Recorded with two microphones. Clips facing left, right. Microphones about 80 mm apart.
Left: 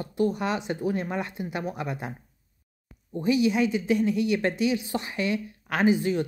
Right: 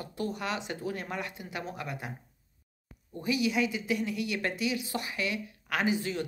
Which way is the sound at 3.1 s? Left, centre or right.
Left.